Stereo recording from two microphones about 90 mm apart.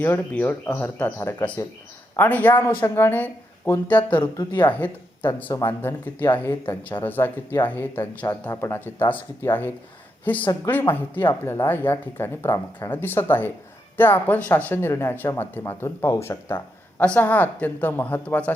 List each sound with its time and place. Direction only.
0.0 s speech: 25° left (ahead or behind)
4.2 s speech: 60° left (ahead or behind)
4.6 s speech: 20° left (ahead or behind)